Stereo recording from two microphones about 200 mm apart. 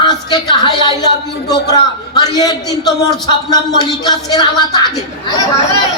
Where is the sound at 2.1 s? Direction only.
20° left (ahead or behind).